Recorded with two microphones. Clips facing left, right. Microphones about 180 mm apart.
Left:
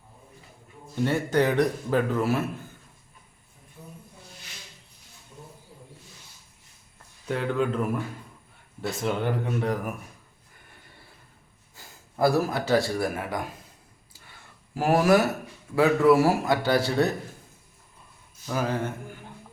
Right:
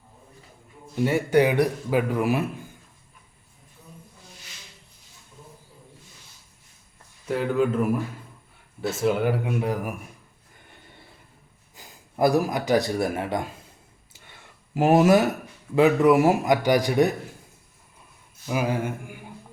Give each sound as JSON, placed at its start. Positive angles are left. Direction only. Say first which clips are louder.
{"t": 1.0, "sound": "a man's voice", "louder": "right 3 dB", "side_deg": -10}
{"t": 7.3, "sound": "a man's voice", "louder": "right 3 dB", "side_deg": -5}
{"t": 11.7, "sound": "speech", "louder": "right 3 dB", "side_deg": -15}
{"t": 14.8, "sound": "a man's voice", "louder": "right 3 dB", "side_deg": -20}
{"t": 18.4, "sound": "a man's voice", "louder": "right 2 dB", "side_deg": -10}